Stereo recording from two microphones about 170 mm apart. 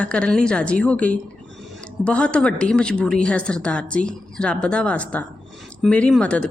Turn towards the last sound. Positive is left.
turn(degrees=5)  # may be behind; listen again after turning